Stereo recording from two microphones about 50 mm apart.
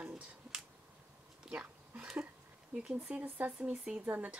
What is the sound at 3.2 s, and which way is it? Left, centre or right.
Speech, right.